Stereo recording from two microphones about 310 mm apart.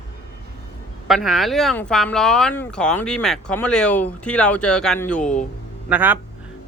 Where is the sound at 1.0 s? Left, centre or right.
Centre.